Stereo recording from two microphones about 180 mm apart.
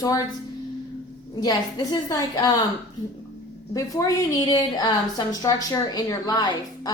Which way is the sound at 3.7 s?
20° left (ahead or behind).